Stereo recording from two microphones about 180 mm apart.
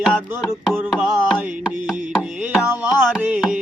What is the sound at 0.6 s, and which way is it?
Carnatic music, 5° right (ahead or behind).